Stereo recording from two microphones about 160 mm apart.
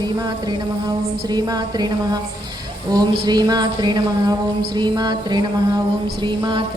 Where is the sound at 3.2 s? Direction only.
25° right (ahead or behind).